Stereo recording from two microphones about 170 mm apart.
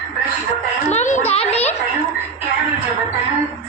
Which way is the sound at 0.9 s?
45° left (ahead or behind).